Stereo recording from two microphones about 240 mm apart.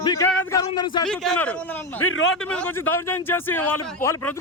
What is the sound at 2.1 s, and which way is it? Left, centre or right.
Speech, left.